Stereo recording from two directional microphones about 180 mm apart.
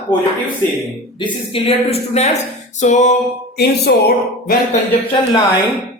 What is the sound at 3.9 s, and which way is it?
Speech, 70° left (ahead or behind).